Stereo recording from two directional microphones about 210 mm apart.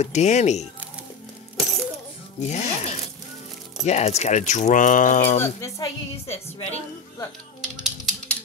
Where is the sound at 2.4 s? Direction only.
35° left (ahead or behind).